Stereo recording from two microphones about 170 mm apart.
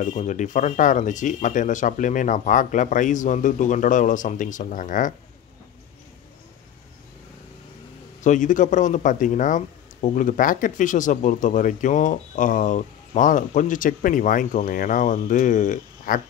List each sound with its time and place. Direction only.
0.0 s speech: 45° left (ahead or behind)
8.2 s speech: 45° left (ahead or behind)